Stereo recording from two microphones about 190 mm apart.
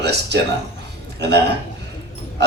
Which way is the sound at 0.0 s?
65° right (ahead or behind).